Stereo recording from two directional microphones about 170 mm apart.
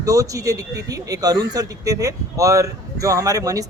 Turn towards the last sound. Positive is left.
turn(degrees=-20)  # may be behind; listen again after turning